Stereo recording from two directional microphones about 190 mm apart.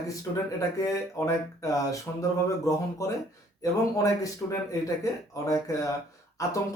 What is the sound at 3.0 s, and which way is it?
Speech, 15° left (ahead or behind).